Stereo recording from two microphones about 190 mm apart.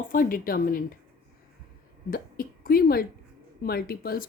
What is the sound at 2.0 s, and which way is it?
Speech, 50° left (ahead or behind).